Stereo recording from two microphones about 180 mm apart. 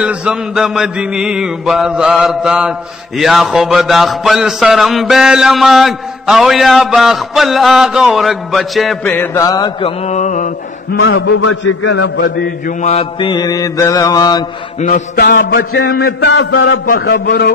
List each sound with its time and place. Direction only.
0.0 s a sound: 5° right (ahead or behind)
9.0 s mantra: 10° left (ahead or behind); by 10.5 s 40° left (ahead or behind)
11.1 s a man's voice: 90° left; by 12.7 s 60° left (ahead or behind)
12.8 s mantra: 30° left (ahead or behind)
15.1 s a man's voice: 75° left (ahead or behind)
16.8 s a man's voice: 55° left (ahead or behind)